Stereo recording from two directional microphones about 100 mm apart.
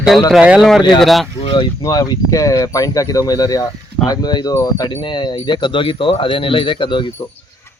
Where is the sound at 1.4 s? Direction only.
55° left (ahead or behind).